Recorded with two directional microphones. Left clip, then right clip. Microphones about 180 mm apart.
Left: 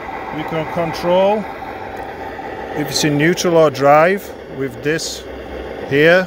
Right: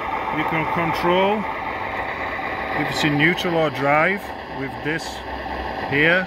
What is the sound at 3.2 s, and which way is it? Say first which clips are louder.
Speech: left 8 dB; 50° left (ahead or behind).